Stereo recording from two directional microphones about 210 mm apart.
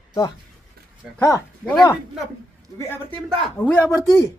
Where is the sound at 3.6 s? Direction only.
10° left (ahead or behind).